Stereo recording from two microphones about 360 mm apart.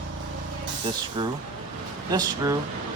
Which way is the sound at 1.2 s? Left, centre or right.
Centre.